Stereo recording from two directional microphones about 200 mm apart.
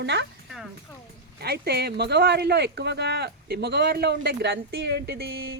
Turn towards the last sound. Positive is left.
turn(degrees=-55)  # may be behind; listen again after turning